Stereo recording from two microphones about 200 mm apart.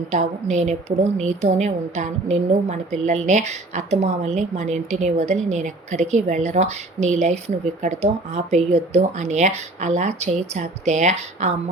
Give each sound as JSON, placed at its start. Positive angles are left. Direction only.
{"t": 0.1, "sound": "a woman's voice", "side_deg": -35}